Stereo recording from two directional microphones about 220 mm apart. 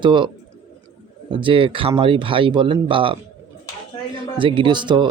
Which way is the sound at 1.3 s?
25° right (ahead or behind).